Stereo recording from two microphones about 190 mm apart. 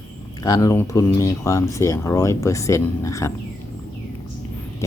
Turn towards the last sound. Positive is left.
turn(degrees=15)  # may be behind; listen again after turning